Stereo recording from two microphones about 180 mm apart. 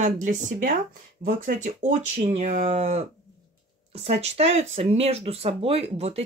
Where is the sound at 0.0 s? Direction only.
45° right (ahead or behind).